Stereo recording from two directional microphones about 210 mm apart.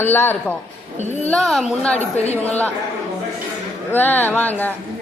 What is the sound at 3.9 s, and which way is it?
Speech, 10° left (ahead or behind).